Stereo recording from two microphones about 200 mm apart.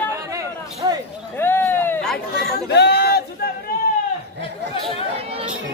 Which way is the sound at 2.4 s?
55° left (ahead or behind).